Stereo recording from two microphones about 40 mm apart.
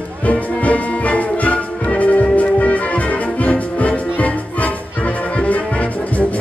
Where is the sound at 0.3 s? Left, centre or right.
Left.